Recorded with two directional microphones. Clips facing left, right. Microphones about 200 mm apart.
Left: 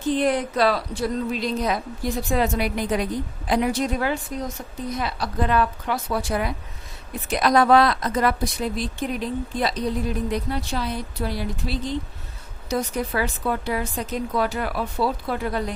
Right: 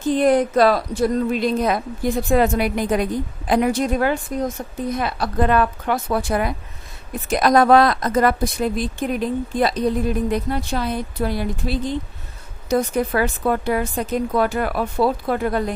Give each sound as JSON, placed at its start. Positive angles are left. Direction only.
{"t": 0.1, "sound": "a woman's voice", "side_deg": -45}